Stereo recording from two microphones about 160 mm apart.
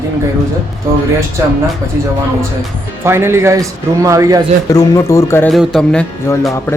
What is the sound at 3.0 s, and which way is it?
A man's voice, 15° right (ahead or behind).